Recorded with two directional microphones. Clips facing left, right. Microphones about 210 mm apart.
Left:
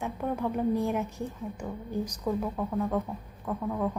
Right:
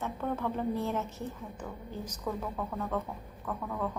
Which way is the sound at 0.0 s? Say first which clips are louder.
Left 3 dB; 15° left (ahead or behind).